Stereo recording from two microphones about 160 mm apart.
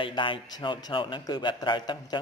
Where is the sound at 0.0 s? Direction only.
30° left (ahead or behind).